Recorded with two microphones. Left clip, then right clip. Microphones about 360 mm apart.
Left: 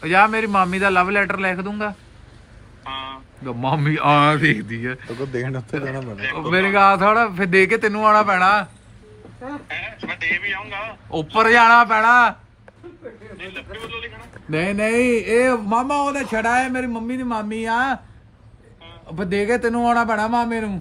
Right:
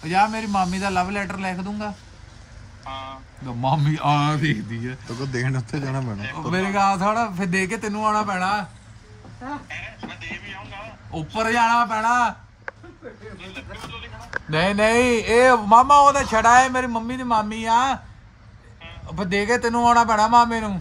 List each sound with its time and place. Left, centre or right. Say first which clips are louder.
0.0 s speech: left 5 dB; centre
2.8 s vehicle: left 3 dB; centre
3.4 s a man's voice: left 1 dB; centre
9.6 s a man's voice: left 6 dB; centre
14.5 s a man's voice: right 1 dB; centre